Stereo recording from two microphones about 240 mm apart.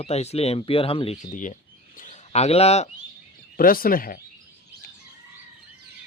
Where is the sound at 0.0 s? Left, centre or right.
Left.